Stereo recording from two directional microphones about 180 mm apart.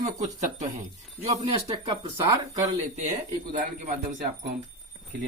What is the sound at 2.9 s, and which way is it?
Speech, 45° right (ahead or behind).